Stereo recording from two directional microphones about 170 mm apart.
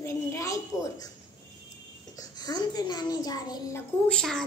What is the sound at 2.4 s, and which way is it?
A child's voice, 25° left (ahead or behind).